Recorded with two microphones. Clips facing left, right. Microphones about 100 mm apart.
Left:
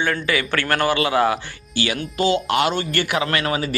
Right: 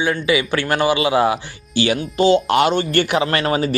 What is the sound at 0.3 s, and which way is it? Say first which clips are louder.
Speech: right 3 dB; 15° right (ahead or behind).